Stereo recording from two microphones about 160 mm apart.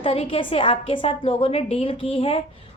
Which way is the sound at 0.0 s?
35° left (ahead or behind).